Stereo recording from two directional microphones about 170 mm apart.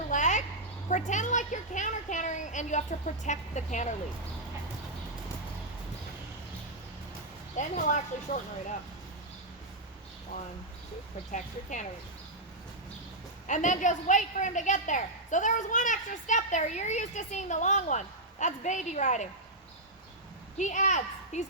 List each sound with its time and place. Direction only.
0.1 s a sound: 45° left (ahead or behind)
0.9 s a woman's voice: 45° left (ahead or behind)
7.6 s a woman's voice: 45° left (ahead or behind)
11.3 s a woman's voice: 45° left (ahead or behind)
13.5 s a woman's voice: 45° left (ahead or behind)
20.6 s a child's voice: 45° left (ahead or behind)